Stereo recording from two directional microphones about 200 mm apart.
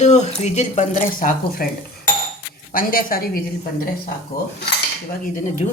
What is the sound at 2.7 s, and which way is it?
Speech, 45° left (ahead or behind).